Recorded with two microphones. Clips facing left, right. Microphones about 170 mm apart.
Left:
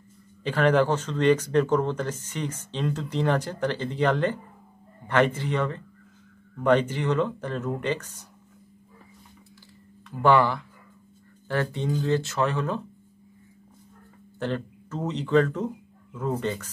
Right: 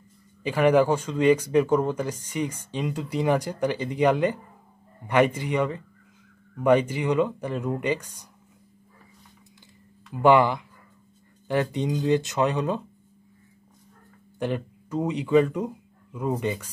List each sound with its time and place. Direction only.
0.4 s speech: 10° right (ahead or behind)
10.2 s speech: 15° right (ahead or behind)
14.4 s speech: 10° right (ahead or behind)